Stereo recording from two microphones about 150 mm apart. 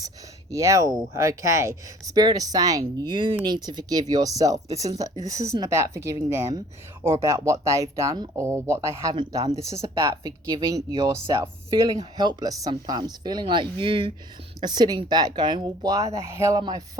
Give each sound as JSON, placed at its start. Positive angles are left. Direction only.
{"t": 0.5, "sound": "speech", "side_deg": -20}
{"t": 10.0, "sound": "speech", "side_deg": -30}